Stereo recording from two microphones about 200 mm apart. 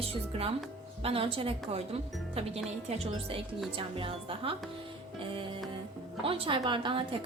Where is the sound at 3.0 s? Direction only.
30° right (ahead or behind).